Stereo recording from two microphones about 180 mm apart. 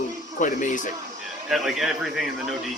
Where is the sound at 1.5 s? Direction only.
Centre (ahead or behind).